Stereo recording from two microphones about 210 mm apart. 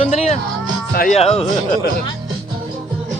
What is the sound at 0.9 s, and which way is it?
Speech, 45° left (ahead or behind).